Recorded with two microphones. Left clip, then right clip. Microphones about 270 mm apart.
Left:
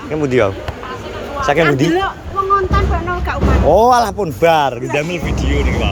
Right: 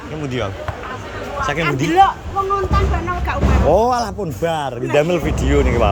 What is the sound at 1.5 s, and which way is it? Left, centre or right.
Speech, centre.